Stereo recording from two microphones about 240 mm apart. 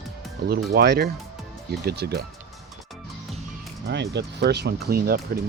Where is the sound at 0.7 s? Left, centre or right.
Right.